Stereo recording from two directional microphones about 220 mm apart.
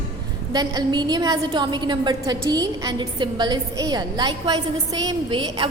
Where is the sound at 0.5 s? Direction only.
20° right (ahead or behind).